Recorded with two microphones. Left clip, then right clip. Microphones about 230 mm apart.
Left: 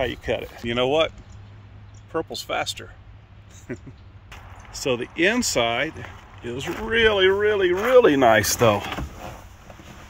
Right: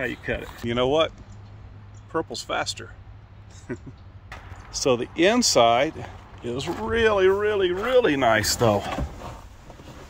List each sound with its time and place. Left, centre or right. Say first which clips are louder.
0.0 s speech: left 3 dB; centre
2.1 s speech: left 1 dB; centre; by 8.8 s left